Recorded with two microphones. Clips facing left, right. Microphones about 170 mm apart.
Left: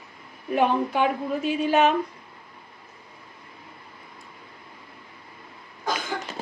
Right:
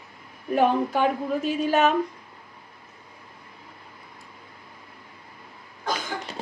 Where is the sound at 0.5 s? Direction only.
45° right (ahead or behind).